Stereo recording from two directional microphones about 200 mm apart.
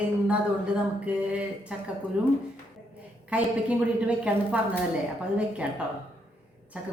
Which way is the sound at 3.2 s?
5° right (ahead or behind).